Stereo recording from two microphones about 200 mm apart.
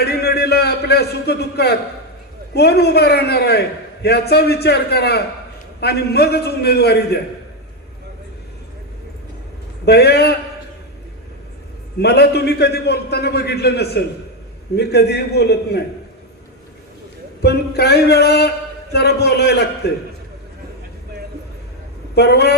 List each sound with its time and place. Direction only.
0.0 s a man's voice: 55° left (ahead or behind)
9.8 s a man's voice: 55° left (ahead or behind)
12.0 s a man's voice: 55° left (ahead or behind)
17.4 s a man's voice: 55° left (ahead or behind)
22.1 s a man's voice: 55° left (ahead or behind)